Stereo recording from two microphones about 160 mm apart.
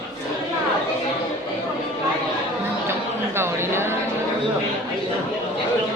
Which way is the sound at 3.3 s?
15° right (ahead or behind).